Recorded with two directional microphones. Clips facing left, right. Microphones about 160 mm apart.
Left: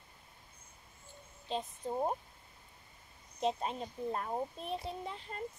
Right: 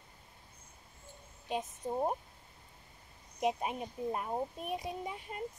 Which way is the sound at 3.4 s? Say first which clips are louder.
Right 1 dB; 15° right (ahead or behind).